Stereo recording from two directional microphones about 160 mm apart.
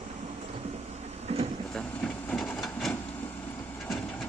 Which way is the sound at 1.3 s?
40° right (ahead or behind).